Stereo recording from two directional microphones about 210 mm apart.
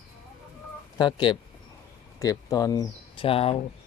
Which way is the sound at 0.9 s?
20° left (ahead or behind).